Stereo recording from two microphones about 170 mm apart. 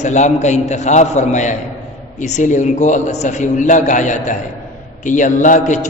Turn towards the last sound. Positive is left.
turn(degrees=45)  # may be behind; listen again after turning